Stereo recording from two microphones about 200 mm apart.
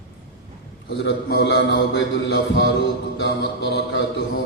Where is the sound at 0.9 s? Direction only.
60° left (ahead or behind).